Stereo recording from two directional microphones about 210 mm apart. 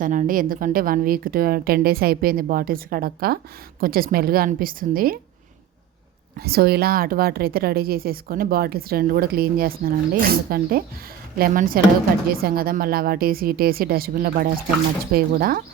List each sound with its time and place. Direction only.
0.0 s a woman's voice: 40° right (ahead or behind)
6.3 s a woman's voice: 45° right (ahead or behind)